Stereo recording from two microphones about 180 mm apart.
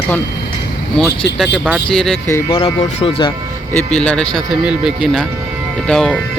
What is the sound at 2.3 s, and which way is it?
Speech, 15° left (ahead or behind).